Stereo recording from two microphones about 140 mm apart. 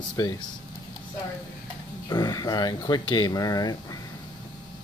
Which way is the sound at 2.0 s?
30° left (ahead or behind).